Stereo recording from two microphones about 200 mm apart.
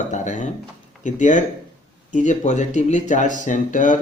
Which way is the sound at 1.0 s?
40° left (ahead or behind).